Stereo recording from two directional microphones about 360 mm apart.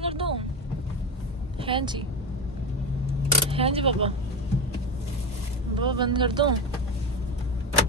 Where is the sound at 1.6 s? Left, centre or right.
Centre.